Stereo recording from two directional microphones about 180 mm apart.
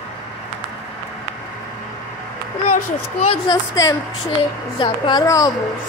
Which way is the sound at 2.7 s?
45° left (ahead or behind).